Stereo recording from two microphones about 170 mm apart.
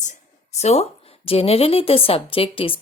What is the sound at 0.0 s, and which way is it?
A woman's voice, 45° left (ahead or behind).